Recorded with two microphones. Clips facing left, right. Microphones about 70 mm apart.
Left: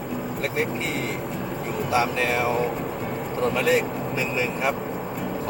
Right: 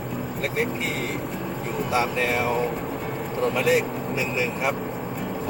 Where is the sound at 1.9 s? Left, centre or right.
Right.